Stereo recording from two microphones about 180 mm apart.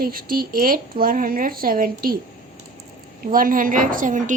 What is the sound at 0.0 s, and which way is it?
A woman's voice, 55° right (ahead or behind).